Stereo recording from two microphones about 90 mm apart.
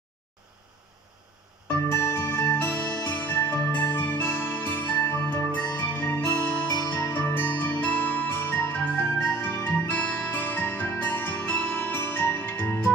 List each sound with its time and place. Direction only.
1.9 s music: 25° left (ahead or behind)